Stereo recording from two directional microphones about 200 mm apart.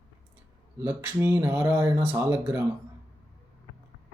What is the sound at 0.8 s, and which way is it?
Speech, 10° right (ahead or behind).